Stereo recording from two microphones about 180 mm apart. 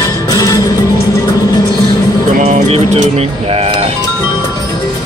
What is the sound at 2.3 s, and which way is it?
Music, 40° right (ahead or behind).